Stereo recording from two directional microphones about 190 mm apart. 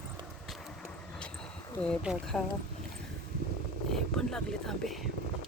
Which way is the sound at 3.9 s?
Centre (ahead or behind).